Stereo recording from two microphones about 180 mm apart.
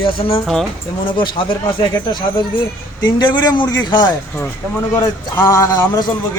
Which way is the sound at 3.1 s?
25° left (ahead or behind).